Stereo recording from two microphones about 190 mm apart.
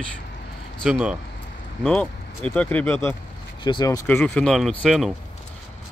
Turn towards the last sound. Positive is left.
turn(degrees=0)  # may be behind; listen again after turning